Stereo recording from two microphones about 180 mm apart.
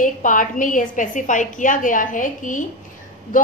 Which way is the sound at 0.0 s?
45° left (ahead or behind).